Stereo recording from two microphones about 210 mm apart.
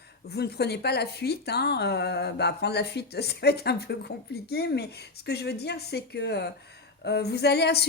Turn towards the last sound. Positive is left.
turn(degrees=50)  # may be behind; listen again after turning